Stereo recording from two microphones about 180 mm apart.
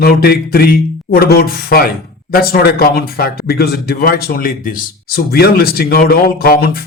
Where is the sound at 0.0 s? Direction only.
60° left (ahead or behind).